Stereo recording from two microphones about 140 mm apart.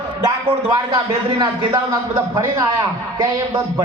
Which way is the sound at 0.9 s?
30° right (ahead or behind).